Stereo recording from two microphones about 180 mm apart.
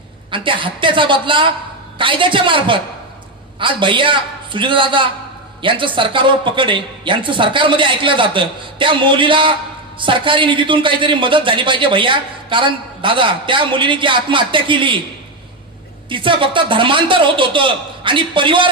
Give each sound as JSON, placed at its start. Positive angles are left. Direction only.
{"t": 0.3, "sound": "a man's voice", "side_deg": -30}
{"t": 16.0, "sound": "a man's voice", "side_deg": -30}